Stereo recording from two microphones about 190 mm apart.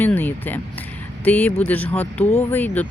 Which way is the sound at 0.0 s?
10° left (ahead or behind).